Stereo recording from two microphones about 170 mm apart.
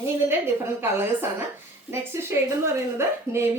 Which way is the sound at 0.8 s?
15° right (ahead or behind).